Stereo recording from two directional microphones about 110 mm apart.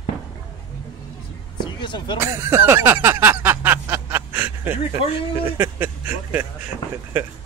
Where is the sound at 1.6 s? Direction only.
45° left (ahead or behind).